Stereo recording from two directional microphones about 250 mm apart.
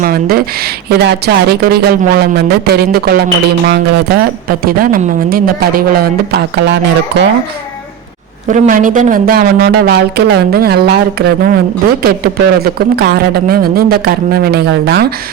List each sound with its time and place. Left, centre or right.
0.0 s speech: right
8.4 s speech: right